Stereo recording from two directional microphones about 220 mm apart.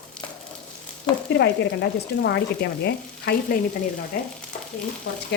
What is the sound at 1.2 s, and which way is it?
Frying, 50° left (ahead or behind).